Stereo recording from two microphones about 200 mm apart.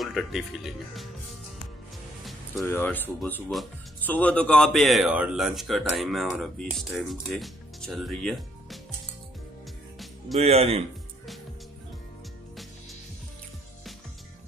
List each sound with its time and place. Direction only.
0.0 s speech: centre (ahead or behind)
2.7 s speech: 10° left (ahead or behind)
10.4 s speech: 30° right (ahead or behind)